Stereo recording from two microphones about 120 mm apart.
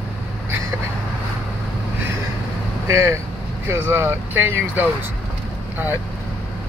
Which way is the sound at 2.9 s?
25° right (ahead or behind).